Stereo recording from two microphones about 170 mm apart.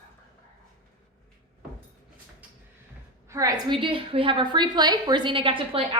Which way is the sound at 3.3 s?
20° right (ahead or behind).